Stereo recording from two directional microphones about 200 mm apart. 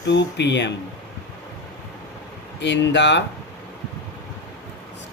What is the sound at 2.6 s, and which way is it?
Speech, 60° left (ahead or behind).